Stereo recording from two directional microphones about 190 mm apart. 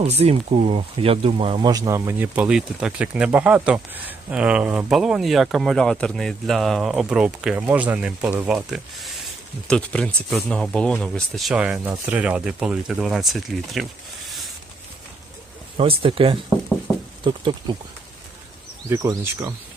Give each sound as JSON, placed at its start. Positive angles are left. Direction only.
{"t": 0.0, "sound": "speech", "side_deg": -35}
{"t": 15.8, "sound": "speech", "side_deg": -30}
{"t": 18.9, "sound": "speech", "side_deg": -15}